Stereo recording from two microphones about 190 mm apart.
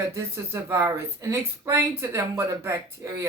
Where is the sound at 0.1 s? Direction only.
15° right (ahead or behind).